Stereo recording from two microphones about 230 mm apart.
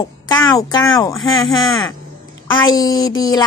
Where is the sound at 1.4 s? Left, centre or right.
Centre.